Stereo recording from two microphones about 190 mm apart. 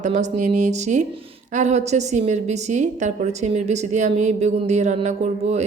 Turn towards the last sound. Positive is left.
turn(degrees=-35)  # may be behind; listen again after turning